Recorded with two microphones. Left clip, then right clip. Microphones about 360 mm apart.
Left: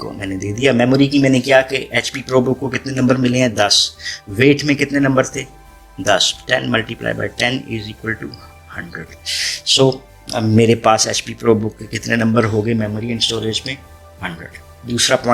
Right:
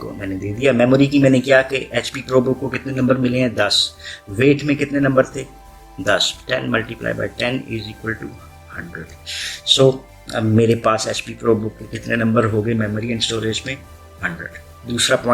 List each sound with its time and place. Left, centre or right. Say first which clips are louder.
0.0 s speech: left 2 dB; centre
14.8 s speech: left 2 dB; centre